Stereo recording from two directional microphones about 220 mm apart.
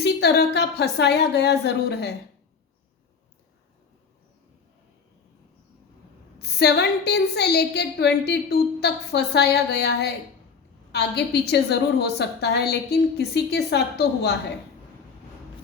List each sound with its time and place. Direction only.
0.0 s a woman's voice: 50° left (ahead or behind)
6.4 s a woman's voice: 50° left (ahead or behind)